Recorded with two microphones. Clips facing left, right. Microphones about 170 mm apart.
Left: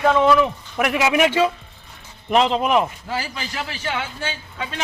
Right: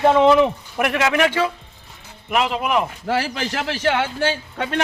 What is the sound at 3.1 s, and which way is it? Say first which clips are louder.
A man's voice: right 6 dB; 80° right.